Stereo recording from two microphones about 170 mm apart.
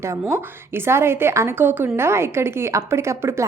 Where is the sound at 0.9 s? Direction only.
15° right (ahead or behind).